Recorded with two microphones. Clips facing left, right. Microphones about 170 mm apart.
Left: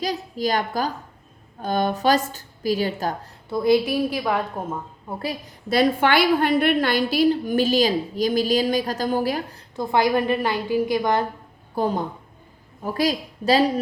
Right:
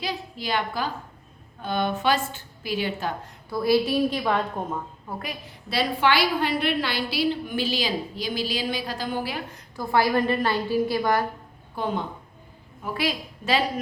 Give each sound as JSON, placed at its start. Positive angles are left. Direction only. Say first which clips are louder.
{"t": 0.0, "sound": "a sound", "louder": "left 7 dB", "side_deg": 40}
{"t": 1.6, "sound": "a woman's voice", "louder": "left 4 dB", "side_deg": 40}
{"t": 3.5, "sound": "a woman's voice", "louder": "left 3 dB", "side_deg": 20}
{"t": 5.2, "sound": "a woman's voice", "louder": "left 6 dB", "side_deg": 40}
{"t": 9.7, "sound": "a woman's voice", "louder": "left 2 dB", "side_deg": 20}
{"t": 11.7, "sound": "a woman's voice", "louder": "left 5 dB", "side_deg": 40}